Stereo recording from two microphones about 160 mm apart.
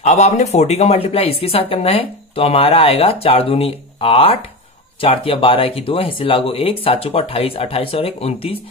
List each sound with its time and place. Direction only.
0.0 s speech: 45° left (ahead or behind)